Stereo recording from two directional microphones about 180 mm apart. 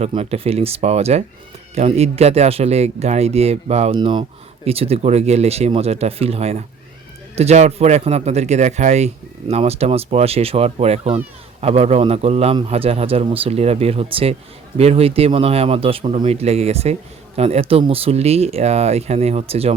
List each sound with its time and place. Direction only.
0.0 s speech: 35° right (ahead or behind)